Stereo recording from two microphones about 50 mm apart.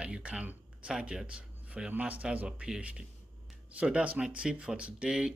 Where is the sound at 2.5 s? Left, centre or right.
Centre.